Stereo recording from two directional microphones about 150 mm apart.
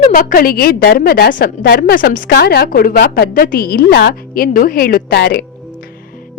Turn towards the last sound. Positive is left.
turn(degrees=90)